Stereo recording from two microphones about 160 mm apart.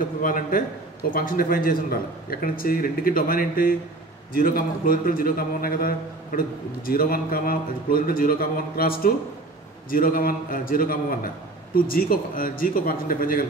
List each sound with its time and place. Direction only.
0.2 s a man's voice: 60° left (ahead or behind)